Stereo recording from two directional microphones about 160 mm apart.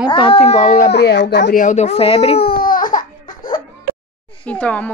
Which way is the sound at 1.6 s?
45° left (ahead or behind).